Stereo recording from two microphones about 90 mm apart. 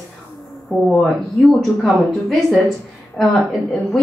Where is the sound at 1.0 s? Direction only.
Centre (ahead or behind).